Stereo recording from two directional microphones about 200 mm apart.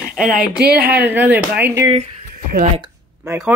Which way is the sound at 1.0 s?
10° right (ahead or behind).